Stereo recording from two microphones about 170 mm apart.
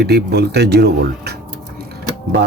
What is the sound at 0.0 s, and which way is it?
Speech, 75° right (ahead or behind).